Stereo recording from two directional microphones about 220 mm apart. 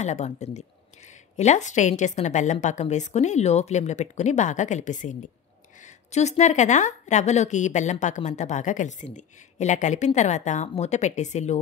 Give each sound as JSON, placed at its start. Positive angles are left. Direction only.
{"t": 0.0, "sound": "speech", "side_deg": 30}